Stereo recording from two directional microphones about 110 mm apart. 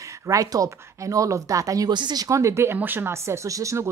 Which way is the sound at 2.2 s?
30° right (ahead or behind).